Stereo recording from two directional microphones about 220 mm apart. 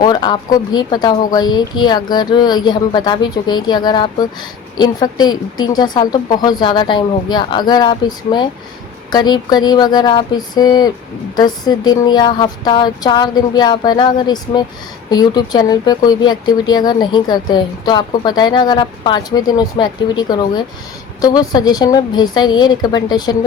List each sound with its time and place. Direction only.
0.0 s speech: 20° left (ahead or behind)